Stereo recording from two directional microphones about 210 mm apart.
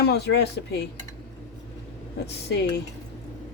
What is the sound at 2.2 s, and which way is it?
Speech, 50° left (ahead or behind).